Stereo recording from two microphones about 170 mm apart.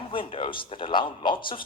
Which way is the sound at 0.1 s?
30° left (ahead or behind).